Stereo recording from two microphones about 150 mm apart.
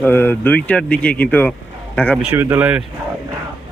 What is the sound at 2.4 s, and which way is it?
Speech, 15° right (ahead or behind).